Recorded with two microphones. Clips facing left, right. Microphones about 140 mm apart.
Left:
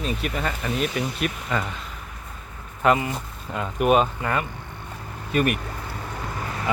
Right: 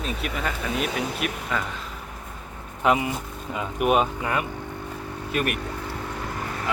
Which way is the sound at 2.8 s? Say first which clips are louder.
Left 1 dB; 10° right (ahead or behind).